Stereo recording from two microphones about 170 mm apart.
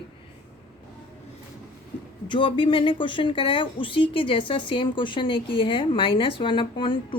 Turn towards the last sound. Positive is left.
turn(degrees=30)  # may be behind; listen again after turning